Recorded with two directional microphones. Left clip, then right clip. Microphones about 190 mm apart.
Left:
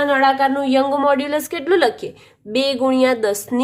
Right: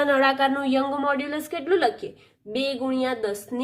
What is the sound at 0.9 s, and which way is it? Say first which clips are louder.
A woman's voice: left 8 dB; 15° left (ahead or behind).